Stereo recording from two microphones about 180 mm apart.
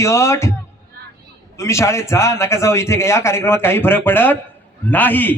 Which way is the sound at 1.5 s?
15° left (ahead or behind).